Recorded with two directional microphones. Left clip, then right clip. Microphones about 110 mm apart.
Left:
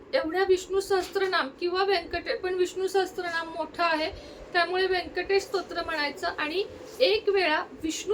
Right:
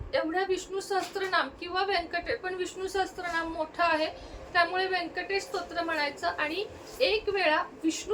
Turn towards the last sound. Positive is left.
turn(degrees=35)  # may be behind; listen again after turning